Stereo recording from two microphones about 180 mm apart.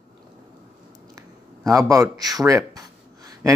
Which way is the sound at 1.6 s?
20° right (ahead or behind).